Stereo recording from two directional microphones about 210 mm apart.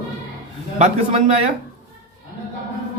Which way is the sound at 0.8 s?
25° right (ahead or behind).